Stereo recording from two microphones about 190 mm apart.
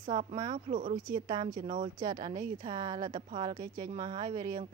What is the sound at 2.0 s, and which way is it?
A woman's voice, 20° right (ahead or behind).